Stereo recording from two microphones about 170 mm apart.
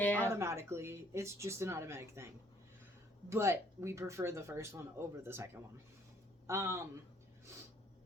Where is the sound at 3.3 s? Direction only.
15° right (ahead or behind).